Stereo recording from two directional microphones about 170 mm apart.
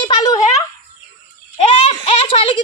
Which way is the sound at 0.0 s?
25° left (ahead or behind).